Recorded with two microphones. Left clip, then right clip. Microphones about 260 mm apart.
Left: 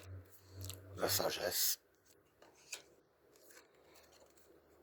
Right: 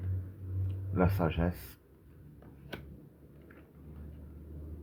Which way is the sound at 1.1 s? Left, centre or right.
Left.